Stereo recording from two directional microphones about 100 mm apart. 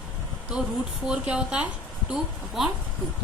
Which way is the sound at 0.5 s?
10° right (ahead or behind).